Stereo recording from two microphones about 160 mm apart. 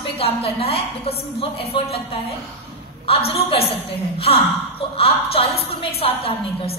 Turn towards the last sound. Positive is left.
turn(degrees=35)  # may be behind; listen again after turning